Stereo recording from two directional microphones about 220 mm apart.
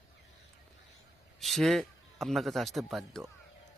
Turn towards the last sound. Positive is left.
turn(degrees=0)  # may be behind; listen again after turning